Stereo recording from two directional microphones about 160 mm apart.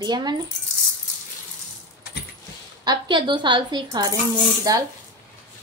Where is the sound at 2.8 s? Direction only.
30° right (ahead or behind).